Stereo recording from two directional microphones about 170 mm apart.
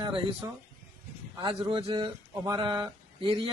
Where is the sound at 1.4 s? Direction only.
25° right (ahead or behind).